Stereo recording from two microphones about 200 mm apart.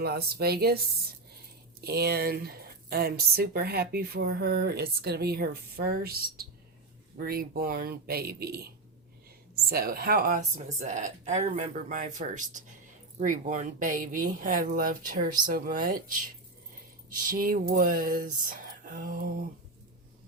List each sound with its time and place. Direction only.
0.0 s speech: 50° right (ahead or behind)
1.8 s speech: 50° right (ahead or behind)